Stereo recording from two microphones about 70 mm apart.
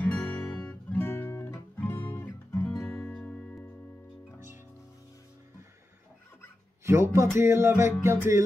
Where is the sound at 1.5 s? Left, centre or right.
Left.